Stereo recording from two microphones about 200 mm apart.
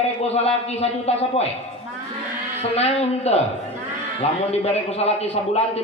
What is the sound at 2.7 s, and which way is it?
Speech, 30° left (ahead or behind).